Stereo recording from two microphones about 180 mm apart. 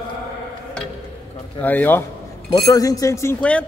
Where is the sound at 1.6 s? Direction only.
10° left (ahead or behind).